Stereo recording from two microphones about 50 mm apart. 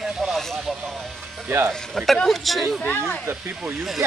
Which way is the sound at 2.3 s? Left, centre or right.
Centre.